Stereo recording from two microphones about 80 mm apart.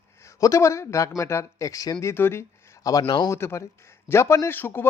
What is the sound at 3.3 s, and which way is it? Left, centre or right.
A man's voice, left.